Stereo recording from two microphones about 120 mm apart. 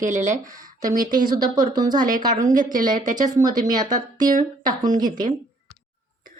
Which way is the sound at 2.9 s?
90° right.